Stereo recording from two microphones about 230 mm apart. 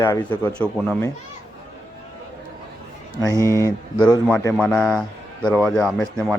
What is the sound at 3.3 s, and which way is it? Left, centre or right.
Speech, centre.